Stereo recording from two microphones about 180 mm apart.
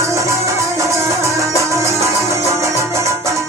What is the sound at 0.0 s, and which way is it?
Music, 15° right (ahead or behind).